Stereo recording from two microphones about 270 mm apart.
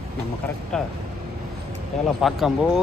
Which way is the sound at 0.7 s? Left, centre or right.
Centre.